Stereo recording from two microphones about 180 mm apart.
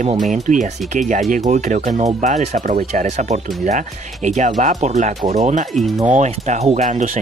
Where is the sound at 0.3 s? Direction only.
45° right (ahead or behind).